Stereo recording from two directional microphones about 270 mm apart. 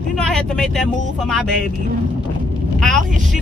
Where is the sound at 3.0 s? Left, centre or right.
Right.